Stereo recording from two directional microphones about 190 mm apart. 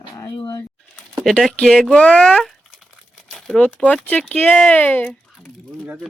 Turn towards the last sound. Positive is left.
turn(degrees=5)  # may be behind; listen again after turning